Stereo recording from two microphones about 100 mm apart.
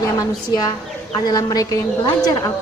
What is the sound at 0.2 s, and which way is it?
A woman's voice, 35° left (ahead or behind).